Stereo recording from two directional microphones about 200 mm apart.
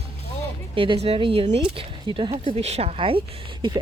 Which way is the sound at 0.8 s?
30° right (ahead or behind).